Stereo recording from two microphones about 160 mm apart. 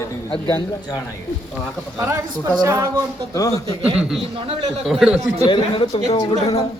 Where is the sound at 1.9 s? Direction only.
15° right (ahead or behind).